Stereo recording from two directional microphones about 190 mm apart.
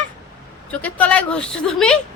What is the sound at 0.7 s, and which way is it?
A woman's voice, 5° left (ahead or behind).